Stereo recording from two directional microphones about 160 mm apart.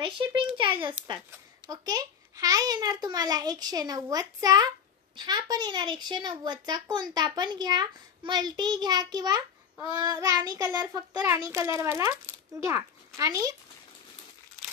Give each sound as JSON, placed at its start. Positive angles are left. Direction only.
{"t": 0.0, "sound": "a child's voice", "side_deg": -30}